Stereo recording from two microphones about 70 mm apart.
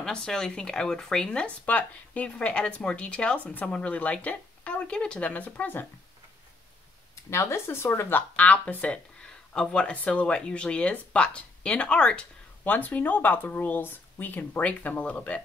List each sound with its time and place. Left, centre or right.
0.0 s speech: centre; by 5.9 s left
7.2 s speech: left
8.2 s speech: left